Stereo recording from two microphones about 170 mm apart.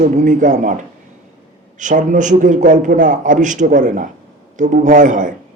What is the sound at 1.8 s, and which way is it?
Speech, 45° right (ahead or behind).